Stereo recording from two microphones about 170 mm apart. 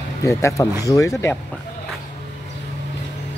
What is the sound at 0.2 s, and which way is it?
Speech, 15° left (ahead or behind).